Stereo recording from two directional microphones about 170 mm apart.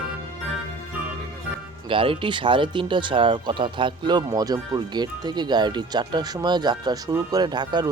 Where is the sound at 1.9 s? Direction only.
30° right (ahead or behind).